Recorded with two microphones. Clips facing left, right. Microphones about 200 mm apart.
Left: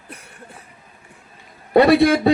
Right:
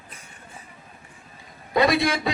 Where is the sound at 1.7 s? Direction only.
60° left (ahead or behind).